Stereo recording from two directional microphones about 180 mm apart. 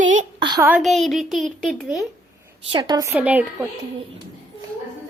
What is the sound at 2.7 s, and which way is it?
Speech, 25° right (ahead or behind).